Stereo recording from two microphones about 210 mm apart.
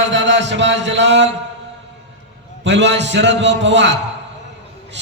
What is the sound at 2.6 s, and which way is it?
A man's voice, 55° right (ahead or behind).